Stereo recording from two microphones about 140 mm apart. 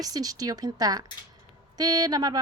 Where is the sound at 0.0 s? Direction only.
25° right (ahead or behind).